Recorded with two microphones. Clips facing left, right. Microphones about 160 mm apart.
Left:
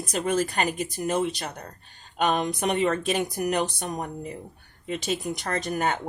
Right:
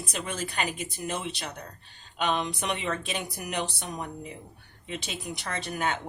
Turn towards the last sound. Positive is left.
turn(degrees=45)  # may be behind; listen again after turning